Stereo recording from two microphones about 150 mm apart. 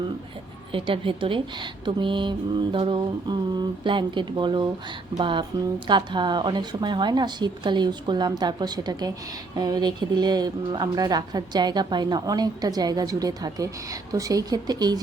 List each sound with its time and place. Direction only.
0.7 s a woman's voice: 35° right (ahead or behind)